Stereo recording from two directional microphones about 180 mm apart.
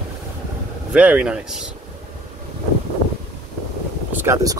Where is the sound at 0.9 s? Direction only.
5° right (ahead or behind).